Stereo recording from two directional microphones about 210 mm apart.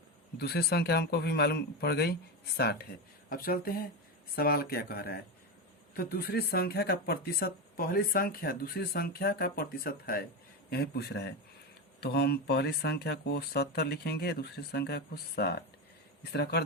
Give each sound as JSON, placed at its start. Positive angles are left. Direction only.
{"t": 0.3, "sound": "speech", "side_deg": 50}